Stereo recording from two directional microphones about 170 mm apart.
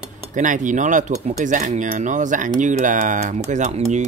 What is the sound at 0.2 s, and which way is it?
Speech, 50° right (ahead or behind).